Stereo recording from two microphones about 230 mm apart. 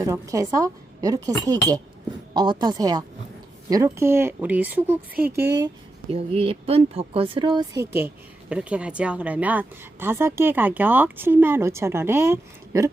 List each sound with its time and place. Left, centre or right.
0.0 s speech: centre
5.5 s speech: right